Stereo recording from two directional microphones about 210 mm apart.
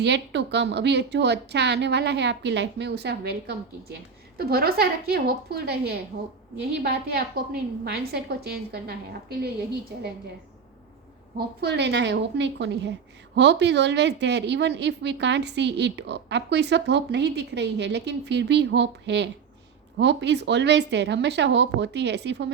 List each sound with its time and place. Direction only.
0.0 s a woman's voice: 55° right (ahead or behind)
11.3 s a woman's voice: 55° right (ahead or behind)